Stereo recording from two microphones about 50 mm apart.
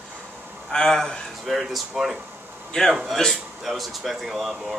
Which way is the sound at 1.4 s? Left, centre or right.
Centre.